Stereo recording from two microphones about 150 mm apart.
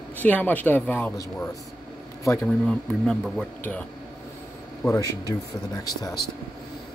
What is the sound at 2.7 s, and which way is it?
Speech, 5° left (ahead or behind).